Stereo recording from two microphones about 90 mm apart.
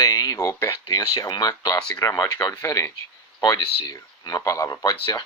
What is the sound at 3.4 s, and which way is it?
Speech, 50° left (ahead or behind).